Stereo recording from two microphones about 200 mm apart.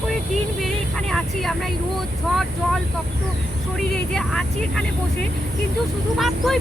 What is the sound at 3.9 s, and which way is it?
Speech, 5° left (ahead or behind).